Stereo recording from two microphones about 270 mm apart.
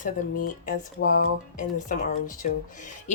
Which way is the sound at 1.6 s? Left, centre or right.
Left.